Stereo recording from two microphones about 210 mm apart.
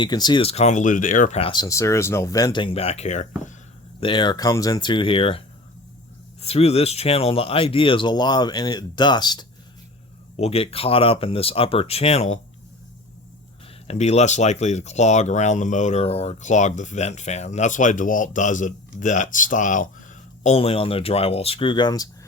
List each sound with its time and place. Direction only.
0.0 s speech: 20° left (ahead or behind)
4.0 s speech: 20° left (ahead or behind)
6.4 s speech: 30° left (ahead or behind)
13.8 s speech: 30° left (ahead or behind)